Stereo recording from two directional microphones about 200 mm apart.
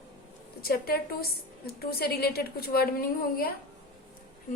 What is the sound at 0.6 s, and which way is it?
A woman's voice, 50° left (ahead or behind).